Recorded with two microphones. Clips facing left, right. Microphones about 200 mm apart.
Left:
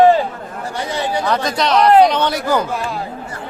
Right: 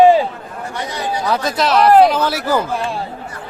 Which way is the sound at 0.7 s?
25° left (ahead or behind).